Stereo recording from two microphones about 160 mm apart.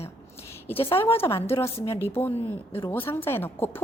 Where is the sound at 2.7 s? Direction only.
15° left (ahead or behind).